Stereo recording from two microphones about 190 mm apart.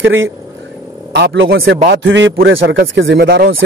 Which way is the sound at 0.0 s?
80° right.